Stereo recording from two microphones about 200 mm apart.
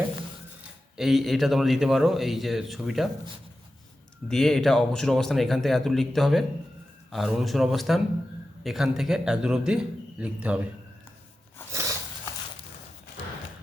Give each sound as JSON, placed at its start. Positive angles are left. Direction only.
{"t": 0.9, "sound": "a man's voice", "side_deg": 0}
{"t": 4.3, "sound": "a man's voice", "side_deg": 0}
{"t": 11.7, "sound": "a sound", "side_deg": -15}